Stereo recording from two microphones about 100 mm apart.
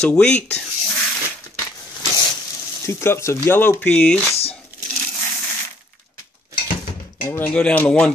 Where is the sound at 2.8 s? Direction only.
25° left (ahead or behind).